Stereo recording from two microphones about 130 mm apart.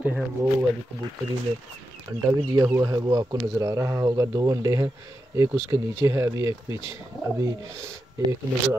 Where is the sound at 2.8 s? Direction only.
30° right (ahead or behind).